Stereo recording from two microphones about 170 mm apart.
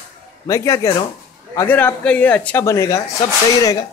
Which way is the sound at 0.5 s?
20° left (ahead or behind).